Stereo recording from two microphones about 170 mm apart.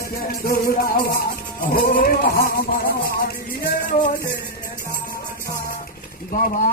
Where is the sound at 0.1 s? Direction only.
60° left (ahead or behind).